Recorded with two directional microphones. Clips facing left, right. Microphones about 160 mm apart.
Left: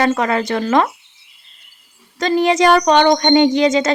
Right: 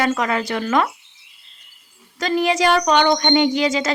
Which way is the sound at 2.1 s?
35° left (ahead or behind).